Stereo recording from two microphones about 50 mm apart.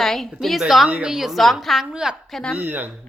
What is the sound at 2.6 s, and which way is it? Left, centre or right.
Speech, right.